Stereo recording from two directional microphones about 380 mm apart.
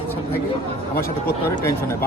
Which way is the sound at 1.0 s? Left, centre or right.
Centre.